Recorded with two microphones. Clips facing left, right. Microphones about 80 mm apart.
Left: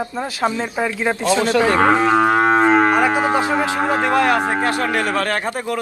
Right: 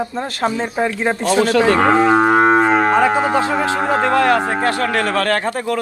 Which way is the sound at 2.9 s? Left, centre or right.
Centre.